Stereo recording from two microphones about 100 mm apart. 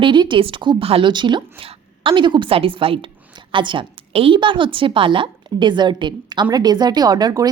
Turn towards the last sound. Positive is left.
turn(degrees=-40)  # may be behind; listen again after turning